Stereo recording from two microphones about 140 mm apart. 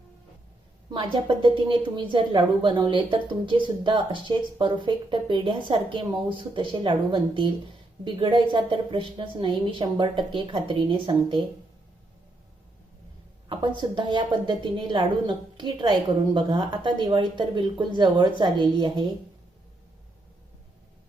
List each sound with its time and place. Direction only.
0.9 s a woman's voice: 35° right (ahead or behind)
13.5 s a woman's voice: 35° right (ahead or behind)